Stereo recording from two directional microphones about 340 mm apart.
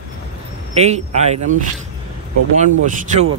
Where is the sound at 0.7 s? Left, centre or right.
Centre.